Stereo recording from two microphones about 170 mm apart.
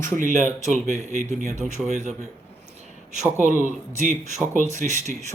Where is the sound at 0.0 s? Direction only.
50° right (ahead or behind).